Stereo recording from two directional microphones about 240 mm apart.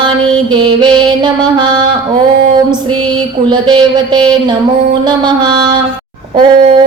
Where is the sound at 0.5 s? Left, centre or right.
Centre.